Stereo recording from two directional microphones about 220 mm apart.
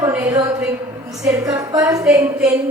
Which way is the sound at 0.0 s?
10° right (ahead or behind).